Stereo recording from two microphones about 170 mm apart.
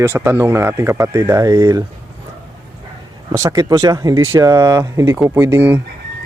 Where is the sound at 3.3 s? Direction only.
20° right (ahead or behind).